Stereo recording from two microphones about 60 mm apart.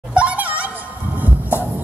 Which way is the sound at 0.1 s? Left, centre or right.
Right.